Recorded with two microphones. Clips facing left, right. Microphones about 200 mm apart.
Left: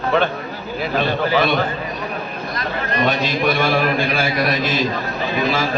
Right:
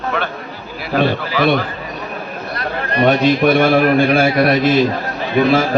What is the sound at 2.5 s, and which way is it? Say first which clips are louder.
A man's voice: right 4 dB; 60° right (ahead or behind).